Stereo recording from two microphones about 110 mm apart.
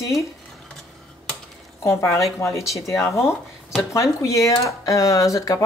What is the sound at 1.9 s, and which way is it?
Speech, 25° left (ahead or behind).